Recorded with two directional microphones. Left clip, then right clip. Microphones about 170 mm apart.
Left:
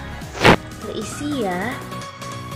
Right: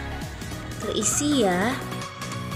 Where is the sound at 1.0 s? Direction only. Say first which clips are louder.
Right 2 dB; 20° right (ahead or behind).